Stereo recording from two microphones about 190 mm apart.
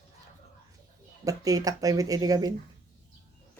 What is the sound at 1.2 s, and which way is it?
Speech, 20° right (ahead or behind).